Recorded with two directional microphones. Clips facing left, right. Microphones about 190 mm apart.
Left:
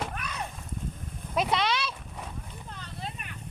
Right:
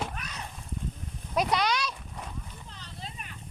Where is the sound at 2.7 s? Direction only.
55° left (ahead or behind).